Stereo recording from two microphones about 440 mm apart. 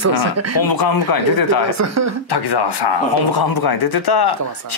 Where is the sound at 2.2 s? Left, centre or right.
Left.